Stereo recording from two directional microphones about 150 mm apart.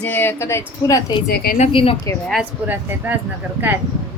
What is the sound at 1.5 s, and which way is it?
Speech, 40° left (ahead or behind).